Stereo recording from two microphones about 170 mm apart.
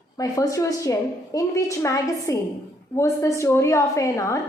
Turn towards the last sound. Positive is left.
turn(degrees=20)  # may be behind; listen again after turning